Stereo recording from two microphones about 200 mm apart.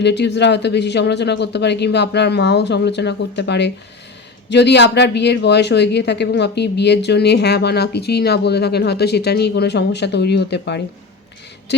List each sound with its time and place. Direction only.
0.0 s speech: 60° left (ahead or behind)